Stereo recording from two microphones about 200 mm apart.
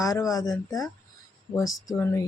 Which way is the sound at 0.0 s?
15° left (ahead or behind).